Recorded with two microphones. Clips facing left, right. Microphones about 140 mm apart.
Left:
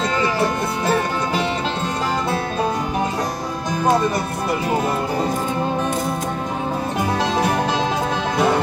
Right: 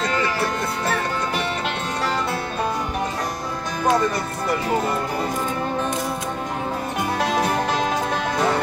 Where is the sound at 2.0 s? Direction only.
15° left (ahead or behind).